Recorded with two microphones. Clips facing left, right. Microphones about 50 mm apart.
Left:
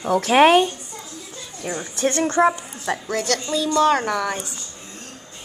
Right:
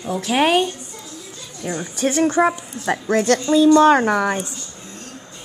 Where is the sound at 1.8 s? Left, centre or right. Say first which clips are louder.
Right 3 dB; centre.